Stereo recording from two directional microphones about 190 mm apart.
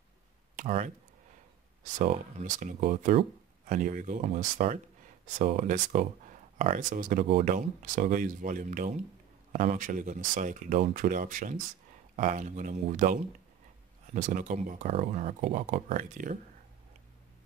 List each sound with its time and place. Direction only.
0.6 s speech: 40° right (ahead or behind)
2.0 s speech: 40° right (ahead or behind)